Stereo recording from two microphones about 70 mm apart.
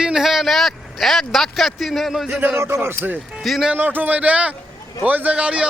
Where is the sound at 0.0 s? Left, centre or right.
Centre.